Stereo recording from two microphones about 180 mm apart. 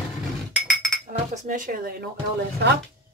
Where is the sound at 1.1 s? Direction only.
50° right (ahead or behind).